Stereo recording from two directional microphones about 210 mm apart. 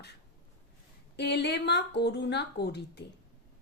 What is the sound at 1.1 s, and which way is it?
A woman's voice, 55° left (ahead or behind).